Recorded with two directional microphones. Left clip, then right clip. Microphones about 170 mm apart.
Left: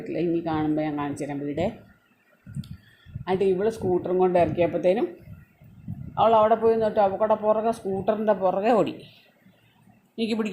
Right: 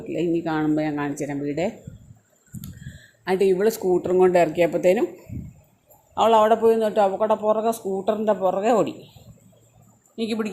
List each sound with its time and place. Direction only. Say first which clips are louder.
0.1 s a man's voice: right 2 dB; 15° right (ahead or behind)
3.2 s speech: right 4 dB; 20° right (ahead or behind)
6.1 s a man's voice: right 2 dB; 15° right (ahead or behind)
10.2 s speech: right 1 dB; 5° left (ahead or behind)